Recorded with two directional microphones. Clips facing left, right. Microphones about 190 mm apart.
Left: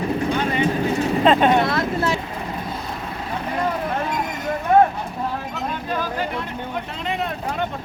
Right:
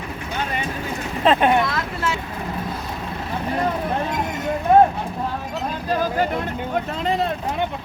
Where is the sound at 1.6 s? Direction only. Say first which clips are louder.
Left 4 dB; 40° left (ahead or behind).